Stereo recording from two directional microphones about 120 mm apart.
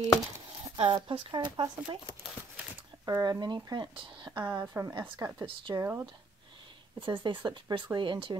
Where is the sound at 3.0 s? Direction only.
30° right (ahead or behind).